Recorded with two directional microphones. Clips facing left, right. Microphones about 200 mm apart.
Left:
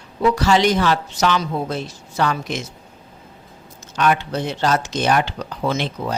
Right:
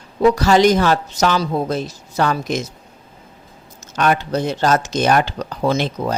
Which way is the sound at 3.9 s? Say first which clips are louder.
Right 2 dB; 40° right (ahead or behind).